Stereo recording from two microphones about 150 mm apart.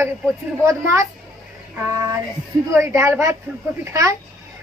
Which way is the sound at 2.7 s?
20° right (ahead or behind).